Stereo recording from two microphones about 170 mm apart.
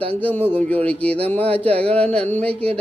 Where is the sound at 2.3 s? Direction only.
5° left (ahead or behind).